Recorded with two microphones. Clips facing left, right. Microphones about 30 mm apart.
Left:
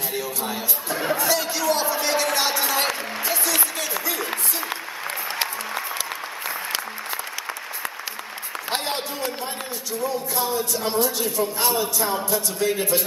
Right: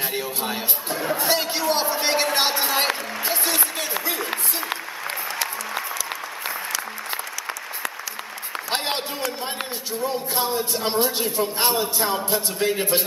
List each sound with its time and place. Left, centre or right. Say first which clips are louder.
0.1 s a man's voice: right 1 dB; right
1.1 s a sound: right 1 dB; right
2.3 s applause: right 1 dB; right
4.2 s applause: even; centre
8.7 s a sound: right 1 dB; right
9.9 s a man's voice: even; right